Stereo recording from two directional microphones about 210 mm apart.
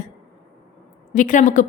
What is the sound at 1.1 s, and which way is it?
Speech, 40° left (ahead or behind).